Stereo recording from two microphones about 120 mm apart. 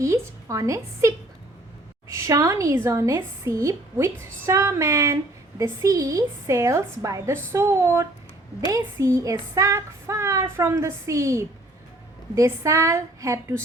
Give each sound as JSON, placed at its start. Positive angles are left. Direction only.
{"t": 0.0, "sound": "a woman's voice", "side_deg": -25}
{"t": 2.1, "sound": "a woman's voice", "side_deg": -25}